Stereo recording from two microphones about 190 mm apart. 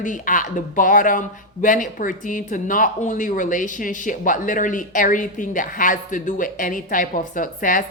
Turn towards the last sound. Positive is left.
turn(degrees=45)  # may be behind; listen again after turning